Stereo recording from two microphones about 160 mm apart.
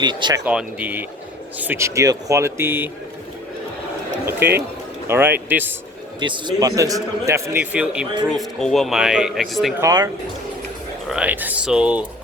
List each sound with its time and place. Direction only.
0.0 s a man's voice: 30° right (ahead or behind)
0.4 s speech: 10° right (ahead or behind)
4.3 s speech: 15° right (ahead or behind)
6.1 s a man's voice: 30° right (ahead or behind); by 9.7 s centre (ahead or behind)
9.8 s a man's voice: 25° right (ahead or behind)
11.1 s speech: 10° right (ahead or behind)